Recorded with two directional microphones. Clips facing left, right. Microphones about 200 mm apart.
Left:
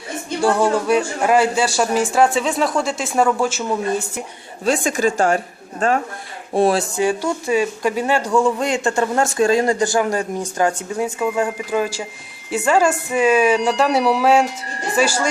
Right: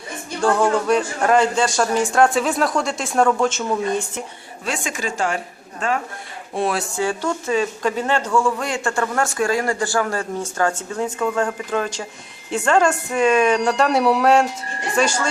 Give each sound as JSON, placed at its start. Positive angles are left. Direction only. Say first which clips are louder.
{"t": 0.4, "sound": "a man's voice", "louder": "left 1 dB", "side_deg": 10}
{"t": 4.6, "sound": "speech", "louder": "left 8 dB", "side_deg": 40}
{"t": 6.5, "sound": "speech", "louder": "left 6 dB", "side_deg": 35}
{"t": 6.9, "sound": "a man's voice", "louder": "left 3 dB", "side_deg": 15}